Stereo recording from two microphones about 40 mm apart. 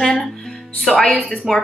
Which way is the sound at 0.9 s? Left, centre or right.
Centre.